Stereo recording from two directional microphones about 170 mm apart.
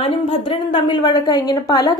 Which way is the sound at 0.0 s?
30° left (ahead or behind).